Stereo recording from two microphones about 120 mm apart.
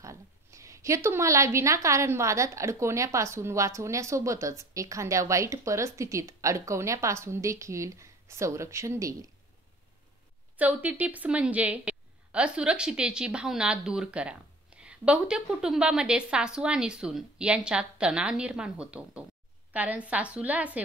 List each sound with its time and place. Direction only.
0.0 s a woman's voice: 25° right (ahead or behind)
10.6 s a woman's voice: 15° right (ahead or behind)